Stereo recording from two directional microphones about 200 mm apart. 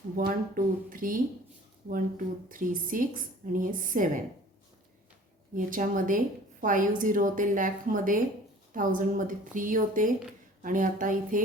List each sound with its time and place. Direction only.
0.2 s speech: 45° right (ahead or behind)
5.5 s a woman's voice: 45° right (ahead or behind)